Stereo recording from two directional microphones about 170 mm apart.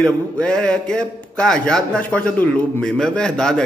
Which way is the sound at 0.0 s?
5° left (ahead or behind).